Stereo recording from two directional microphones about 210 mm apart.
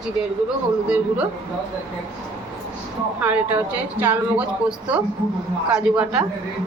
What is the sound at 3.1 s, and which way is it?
Speech, 5° right (ahead or behind).